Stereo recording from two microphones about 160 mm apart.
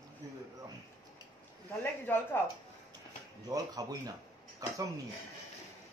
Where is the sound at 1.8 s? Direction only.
10° left (ahead or behind).